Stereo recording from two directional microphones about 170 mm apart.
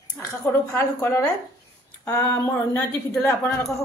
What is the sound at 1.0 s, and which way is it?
A woman's voice, 15° left (ahead or behind).